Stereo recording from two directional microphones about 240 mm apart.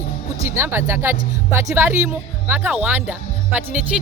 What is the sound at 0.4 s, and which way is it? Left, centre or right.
Speech, centre.